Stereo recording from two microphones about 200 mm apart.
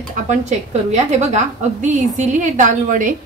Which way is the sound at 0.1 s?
35° right (ahead or behind).